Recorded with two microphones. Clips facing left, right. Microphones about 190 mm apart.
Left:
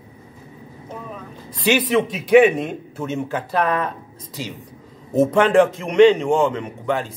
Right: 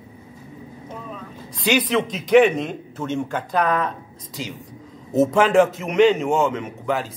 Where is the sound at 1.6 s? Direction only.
5° left (ahead or behind).